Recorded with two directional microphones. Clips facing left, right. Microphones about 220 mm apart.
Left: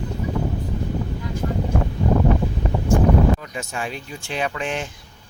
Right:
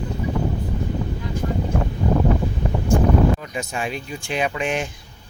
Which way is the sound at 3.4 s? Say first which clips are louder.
Right 2 dB; 15° right (ahead or behind).